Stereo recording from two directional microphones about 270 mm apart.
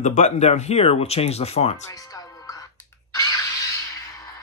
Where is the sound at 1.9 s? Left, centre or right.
Centre.